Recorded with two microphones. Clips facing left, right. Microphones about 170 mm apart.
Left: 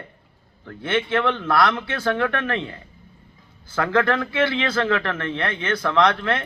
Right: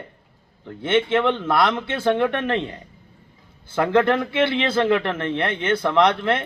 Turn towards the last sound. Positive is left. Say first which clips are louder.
# right 1 dB
turn(degrees=-20)  # may be behind; listen again after turning